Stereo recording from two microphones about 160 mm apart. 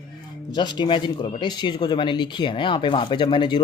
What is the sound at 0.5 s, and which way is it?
Speech, 30° left (ahead or behind).